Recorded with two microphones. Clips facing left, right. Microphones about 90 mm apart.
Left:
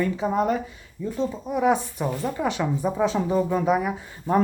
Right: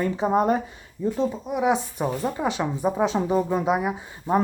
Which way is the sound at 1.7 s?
20° right (ahead or behind).